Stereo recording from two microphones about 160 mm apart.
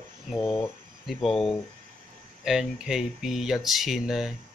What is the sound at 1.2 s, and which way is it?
Speech, centre (ahead or behind).